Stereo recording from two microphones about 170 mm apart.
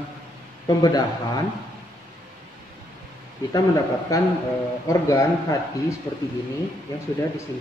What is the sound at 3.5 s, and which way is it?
A man's voice, 20° left (ahead or behind).